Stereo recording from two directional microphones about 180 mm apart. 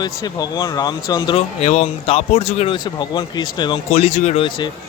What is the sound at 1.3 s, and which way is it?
Speech, 35° left (ahead or behind).